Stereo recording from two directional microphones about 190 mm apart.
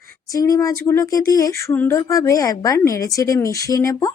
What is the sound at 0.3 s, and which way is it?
Speech, 20° left (ahead or behind).